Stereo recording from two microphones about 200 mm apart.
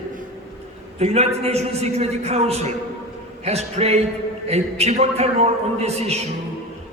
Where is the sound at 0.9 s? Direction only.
30° right (ahead or behind).